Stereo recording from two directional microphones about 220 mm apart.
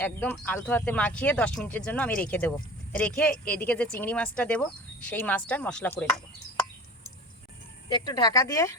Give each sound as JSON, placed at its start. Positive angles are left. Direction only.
{"t": 0.0, "sound": "speech", "side_deg": 10}
{"t": 7.9, "sound": "speech", "side_deg": 20}